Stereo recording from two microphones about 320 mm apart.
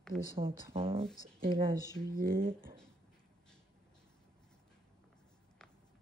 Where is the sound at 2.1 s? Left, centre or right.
Right.